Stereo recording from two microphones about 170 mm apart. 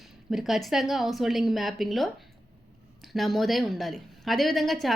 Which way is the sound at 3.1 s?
Centre (ahead or behind).